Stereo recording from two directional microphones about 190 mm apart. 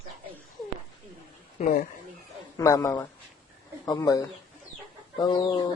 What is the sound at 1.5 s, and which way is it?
Speech, 40° left (ahead or behind).